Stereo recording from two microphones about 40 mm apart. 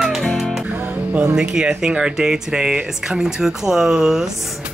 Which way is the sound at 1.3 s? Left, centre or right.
Right.